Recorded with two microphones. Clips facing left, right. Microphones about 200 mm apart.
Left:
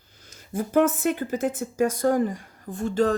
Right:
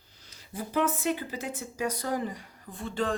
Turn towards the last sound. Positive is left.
turn(degrees=40)  # may be behind; listen again after turning